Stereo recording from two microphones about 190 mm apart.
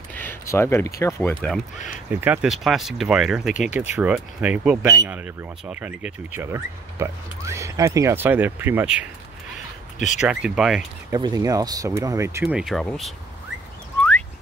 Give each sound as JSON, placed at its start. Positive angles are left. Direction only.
{"t": 0.1, "sound": "speech", "side_deg": 10}
{"t": 2.0, "sound": "speech", "side_deg": -10}
{"t": 9.9, "sound": "speech", "side_deg": 40}
{"t": 10.2, "sound": "speech", "side_deg": -5}
{"t": 11.1, "sound": "speech", "side_deg": -20}
{"t": 12.4, "sound": "speech", "side_deg": 0}